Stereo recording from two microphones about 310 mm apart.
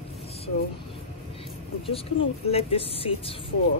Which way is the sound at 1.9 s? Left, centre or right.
Centre.